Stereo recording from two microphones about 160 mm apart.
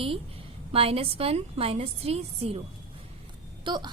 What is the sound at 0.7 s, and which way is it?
A woman's voice, 35° right (ahead or behind).